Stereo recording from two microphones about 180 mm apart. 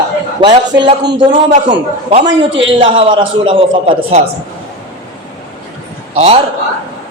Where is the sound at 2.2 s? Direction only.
90° right.